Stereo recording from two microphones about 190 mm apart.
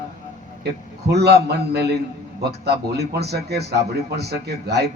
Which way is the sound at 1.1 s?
60° right (ahead or behind).